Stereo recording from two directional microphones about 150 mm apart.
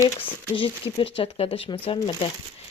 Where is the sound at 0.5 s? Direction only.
35° left (ahead or behind).